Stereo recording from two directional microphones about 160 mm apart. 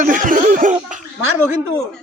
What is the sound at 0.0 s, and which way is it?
Laughter, 55° right (ahead or behind).